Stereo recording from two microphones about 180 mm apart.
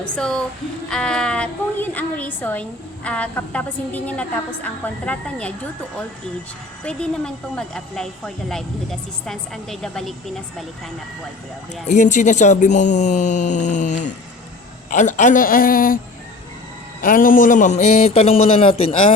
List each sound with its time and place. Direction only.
0.0 s a woman's voice: 5° left (ahead or behind)
6.8 s a woman's voice: 5° left (ahead or behind)
11.9 s a woman's voice: 40° left (ahead or behind)
17.0 s speech: 50° left (ahead or behind); by 19.1 s 30° left (ahead or behind)